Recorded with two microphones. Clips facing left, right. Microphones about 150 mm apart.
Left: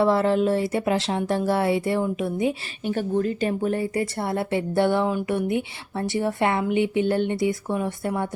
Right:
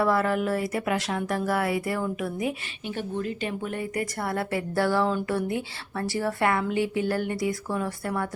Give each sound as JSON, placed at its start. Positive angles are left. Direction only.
{"t": 0.0, "sound": "speech", "side_deg": 25}
{"t": 2.8, "sound": "speech", "side_deg": 45}